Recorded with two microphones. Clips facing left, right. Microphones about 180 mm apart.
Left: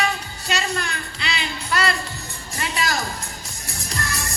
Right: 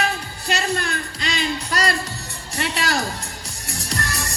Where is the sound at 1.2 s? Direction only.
40° right (ahead or behind).